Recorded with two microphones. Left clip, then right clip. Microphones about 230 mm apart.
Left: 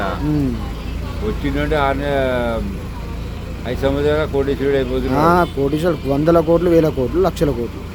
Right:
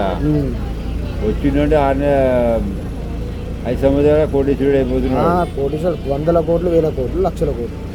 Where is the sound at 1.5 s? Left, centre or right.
Centre.